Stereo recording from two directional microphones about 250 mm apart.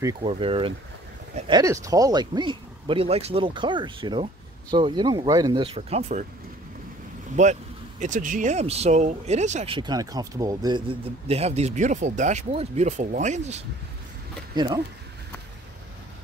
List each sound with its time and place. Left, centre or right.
0.0 s speech: right
7.4 s speech: right
14.5 s speech: centre